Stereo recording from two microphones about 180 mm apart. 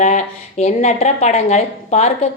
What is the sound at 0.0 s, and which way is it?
Speech, 40° left (ahead or behind).